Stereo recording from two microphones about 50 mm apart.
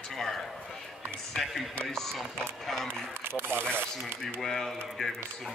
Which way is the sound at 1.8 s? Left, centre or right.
Centre.